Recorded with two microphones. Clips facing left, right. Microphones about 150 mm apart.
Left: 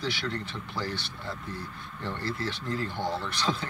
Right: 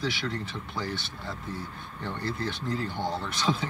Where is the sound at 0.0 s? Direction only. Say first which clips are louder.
Right 1 dB; centre (ahead or behind).